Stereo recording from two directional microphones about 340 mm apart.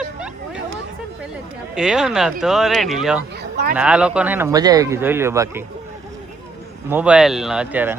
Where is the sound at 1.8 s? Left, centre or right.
Centre.